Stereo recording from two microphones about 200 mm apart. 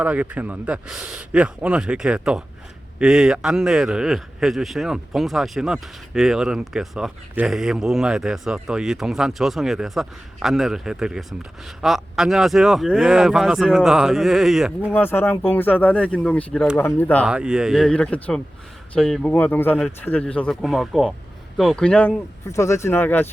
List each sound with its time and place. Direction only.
0.0 s a man's voice: 5° right (ahead or behind)
14.9 s speech: 10° left (ahead or behind)
17.2 s a man's voice: 5° right (ahead or behind)